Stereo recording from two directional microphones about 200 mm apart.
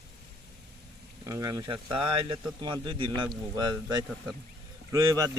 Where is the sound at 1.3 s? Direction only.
15° right (ahead or behind).